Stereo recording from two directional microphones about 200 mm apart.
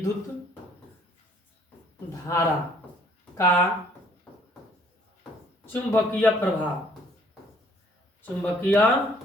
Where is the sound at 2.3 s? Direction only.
15° left (ahead or behind).